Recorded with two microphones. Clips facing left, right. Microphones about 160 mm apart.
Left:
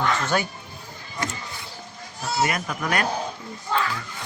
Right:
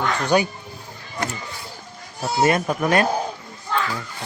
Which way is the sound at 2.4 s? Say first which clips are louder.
Right 7 dB; 30° right (ahead or behind).